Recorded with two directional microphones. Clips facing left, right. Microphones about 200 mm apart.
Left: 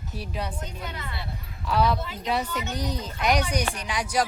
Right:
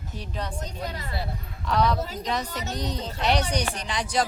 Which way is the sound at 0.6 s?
35° right (ahead or behind).